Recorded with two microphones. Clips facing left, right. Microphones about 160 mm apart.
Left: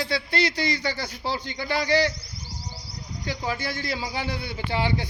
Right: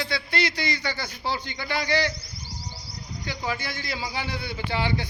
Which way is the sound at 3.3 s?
35° left (ahead or behind).